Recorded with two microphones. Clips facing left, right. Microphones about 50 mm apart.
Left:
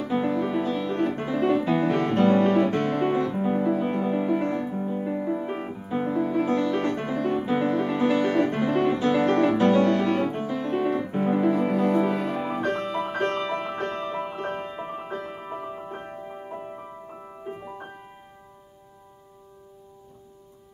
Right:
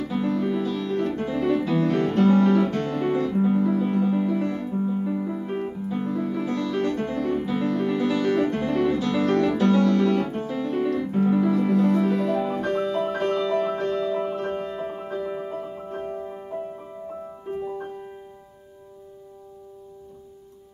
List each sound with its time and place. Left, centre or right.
0.0 s music: left
3.5 s music: left